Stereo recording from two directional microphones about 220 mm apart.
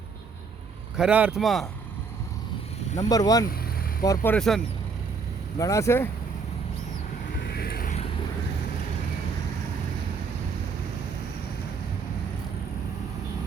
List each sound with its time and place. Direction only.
0.9 s speech: 5° right (ahead or behind)
3.1 s speech: 15° left (ahead or behind)
5.5 s speech: 15° left (ahead or behind)
7.4 s vehicle: 45° left (ahead or behind)